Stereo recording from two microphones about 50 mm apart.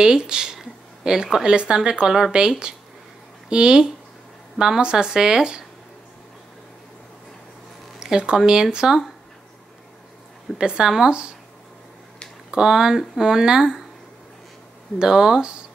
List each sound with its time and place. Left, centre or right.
0.0 s speech: centre
8.0 s speech: centre
10.6 s speech: centre
12.4 s speech: centre
15.0 s speech: centre